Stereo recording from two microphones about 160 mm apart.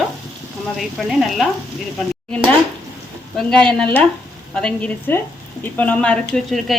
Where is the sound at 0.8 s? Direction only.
Centre (ahead or behind).